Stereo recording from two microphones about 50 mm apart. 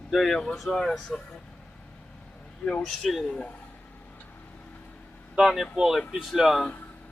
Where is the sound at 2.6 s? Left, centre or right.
Centre.